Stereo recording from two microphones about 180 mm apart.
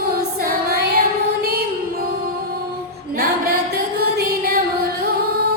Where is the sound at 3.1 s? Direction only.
55° right (ahead or behind).